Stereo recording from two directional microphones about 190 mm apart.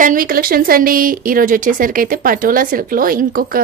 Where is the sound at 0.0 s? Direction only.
45° right (ahead or behind).